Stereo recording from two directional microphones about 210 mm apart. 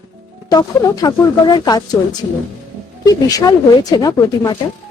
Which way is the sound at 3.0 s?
15° left (ahead or behind).